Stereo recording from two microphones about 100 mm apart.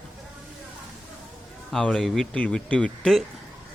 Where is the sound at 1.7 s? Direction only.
5° left (ahead or behind).